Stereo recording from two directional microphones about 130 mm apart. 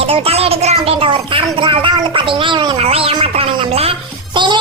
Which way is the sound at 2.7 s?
50° right (ahead or behind).